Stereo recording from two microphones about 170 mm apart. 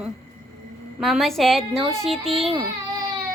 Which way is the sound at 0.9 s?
Centre (ahead or behind).